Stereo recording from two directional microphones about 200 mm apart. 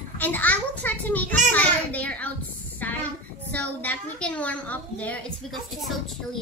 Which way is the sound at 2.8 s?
10° left (ahead or behind).